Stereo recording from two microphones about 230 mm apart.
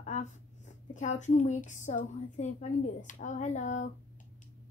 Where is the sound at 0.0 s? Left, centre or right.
Left.